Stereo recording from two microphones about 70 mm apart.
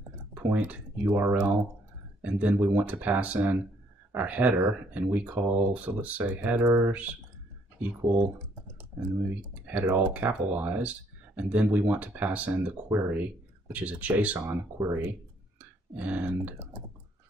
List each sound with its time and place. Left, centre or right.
0.3 s speech: right
9.3 s speech: right
14.8 s speech: right
15.9 s speech: right